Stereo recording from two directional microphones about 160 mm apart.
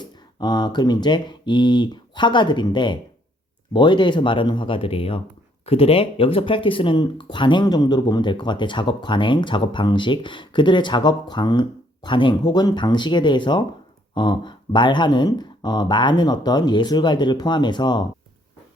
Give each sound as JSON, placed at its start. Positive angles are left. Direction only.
{"t": 0.0, "sound": "speech", "side_deg": 25}